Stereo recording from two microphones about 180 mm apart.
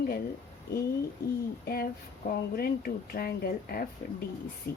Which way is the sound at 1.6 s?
55° left (ahead or behind).